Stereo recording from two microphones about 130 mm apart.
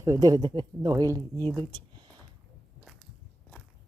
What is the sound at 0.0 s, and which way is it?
Speech, 25° right (ahead or behind).